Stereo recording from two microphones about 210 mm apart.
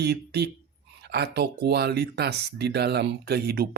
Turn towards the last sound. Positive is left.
turn(degrees=-45)  # may be behind; listen again after turning